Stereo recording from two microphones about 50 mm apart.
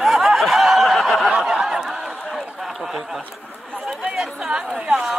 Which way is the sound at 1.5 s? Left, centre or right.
Centre.